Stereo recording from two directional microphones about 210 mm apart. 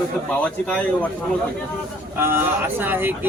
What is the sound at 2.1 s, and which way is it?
Speech, 10° right (ahead or behind).